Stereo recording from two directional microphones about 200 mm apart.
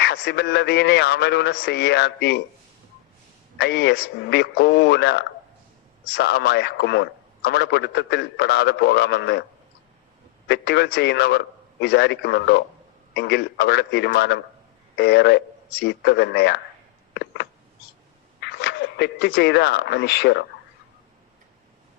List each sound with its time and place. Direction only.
0.0 s a man's voice: 55° left (ahead or behind)
3.6 s a man's voice: 55° left (ahead or behind)
10.5 s a man's voice: 55° left (ahead or behind)
18.3 s speech: 55° left (ahead or behind)